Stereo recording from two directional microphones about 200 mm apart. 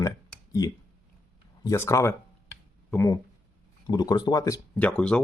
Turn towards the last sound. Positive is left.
turn(degrees=5)  # may be behind; listen again after turning